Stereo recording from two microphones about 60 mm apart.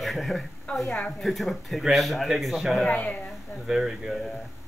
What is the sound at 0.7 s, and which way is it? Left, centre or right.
Speech, left.